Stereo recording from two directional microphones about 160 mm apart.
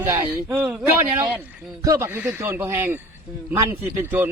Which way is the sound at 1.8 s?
20° right (ahead or behind).